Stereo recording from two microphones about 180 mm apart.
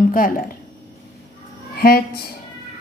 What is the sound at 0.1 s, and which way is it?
Speech, 50° left (ahead or behind).